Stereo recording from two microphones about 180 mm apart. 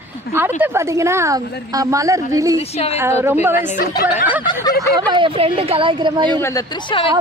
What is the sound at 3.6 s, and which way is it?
Speech, 55° left (ahead or behind).